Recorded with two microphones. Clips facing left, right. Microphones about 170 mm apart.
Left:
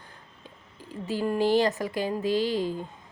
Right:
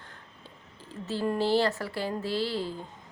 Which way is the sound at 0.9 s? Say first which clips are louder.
Left 2 dB; 15° left (ahead or behind).